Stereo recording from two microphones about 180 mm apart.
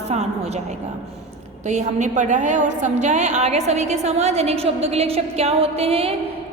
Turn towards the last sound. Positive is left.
turn(degrees=-35)  # may be behind; listen again after turning